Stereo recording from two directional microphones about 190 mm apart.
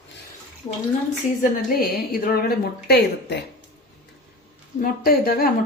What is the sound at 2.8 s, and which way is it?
Speech, 60° left (ahead or behind).